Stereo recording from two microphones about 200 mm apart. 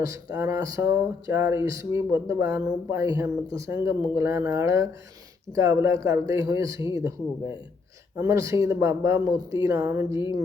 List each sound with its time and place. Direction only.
0.0 s speech: 15° right (ahead or behind)
10.1 s speech: 25° left (ahead or behind)